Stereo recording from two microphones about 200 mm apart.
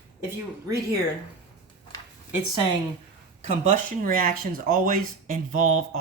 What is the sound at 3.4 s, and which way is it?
Speech, 40° right (ahead or behind).